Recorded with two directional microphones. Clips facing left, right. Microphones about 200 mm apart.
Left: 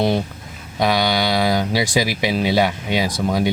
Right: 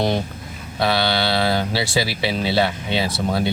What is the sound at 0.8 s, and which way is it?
Speech, 15° left (ahead or behind).